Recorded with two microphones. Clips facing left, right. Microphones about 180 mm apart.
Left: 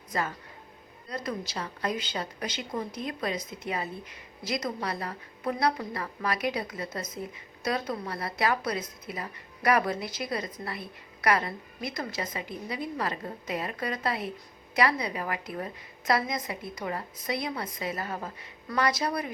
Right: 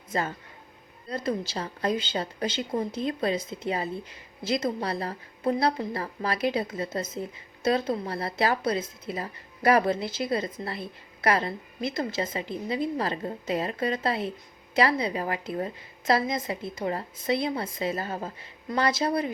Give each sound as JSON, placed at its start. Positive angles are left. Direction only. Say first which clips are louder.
{"t": 0.1, "sound": "a woman's voice", "louder": "right 2 dB", "side_deg": -30}